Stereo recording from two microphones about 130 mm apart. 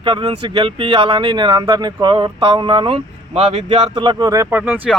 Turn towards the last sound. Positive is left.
turn(degrees=-10)  # may be behind; listen again after turning